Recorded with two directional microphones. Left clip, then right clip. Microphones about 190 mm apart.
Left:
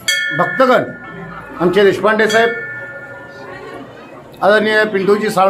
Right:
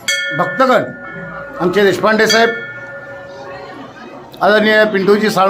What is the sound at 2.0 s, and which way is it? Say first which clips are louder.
Speech: right 1 dB; 55° right (ahead or behind).